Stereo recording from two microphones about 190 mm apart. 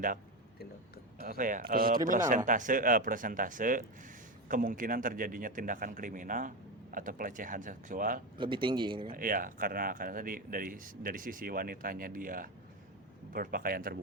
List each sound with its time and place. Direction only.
1.2 s speech: 50° right (ahead or behind)
8.4 s speech: 25° right (ahead or behind)
9.1 s speech: 45° right (ahead or behind)